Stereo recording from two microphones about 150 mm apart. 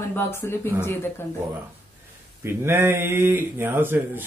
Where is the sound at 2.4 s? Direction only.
15° right (ahead or behind).